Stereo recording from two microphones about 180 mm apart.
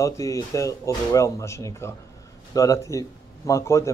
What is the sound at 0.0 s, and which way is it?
Speech, 15° left (ahead or behind).